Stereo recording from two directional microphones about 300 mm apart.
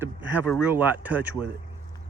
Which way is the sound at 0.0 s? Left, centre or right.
Centre.